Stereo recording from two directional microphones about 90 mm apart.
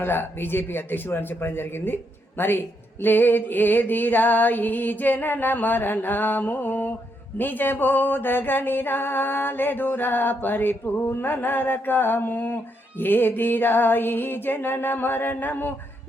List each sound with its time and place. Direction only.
0.0 s a man's voice: 25° left (ahead or behind)